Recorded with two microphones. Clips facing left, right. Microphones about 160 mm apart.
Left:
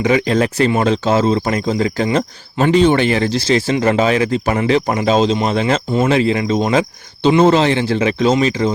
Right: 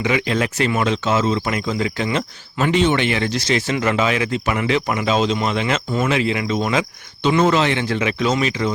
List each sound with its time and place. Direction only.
0.0 s speech: 35° left (ahead or behind)